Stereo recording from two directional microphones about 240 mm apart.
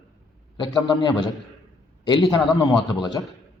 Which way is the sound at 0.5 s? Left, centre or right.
Centre.